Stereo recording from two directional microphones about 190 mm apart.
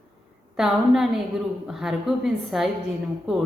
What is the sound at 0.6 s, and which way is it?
A woman's voice, centre (ahead or behind).